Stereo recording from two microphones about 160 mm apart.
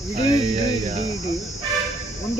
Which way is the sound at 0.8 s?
45° right (ahead or behind).